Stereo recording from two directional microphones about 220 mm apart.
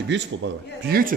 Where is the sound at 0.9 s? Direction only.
45° right (ahead or behind).